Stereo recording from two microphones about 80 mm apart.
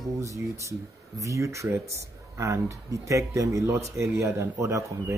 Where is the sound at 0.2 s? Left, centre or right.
Right.